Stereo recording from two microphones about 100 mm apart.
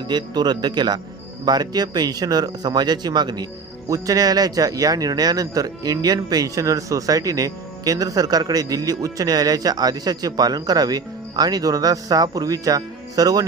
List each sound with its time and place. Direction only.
0.1 s speech: 45° right (ahead or behind)